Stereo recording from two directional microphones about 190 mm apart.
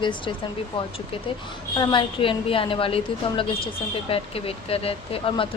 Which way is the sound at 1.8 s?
25° left (ahead or behind).